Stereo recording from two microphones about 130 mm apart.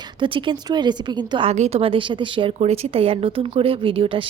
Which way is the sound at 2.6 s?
55° right (ahead or behind).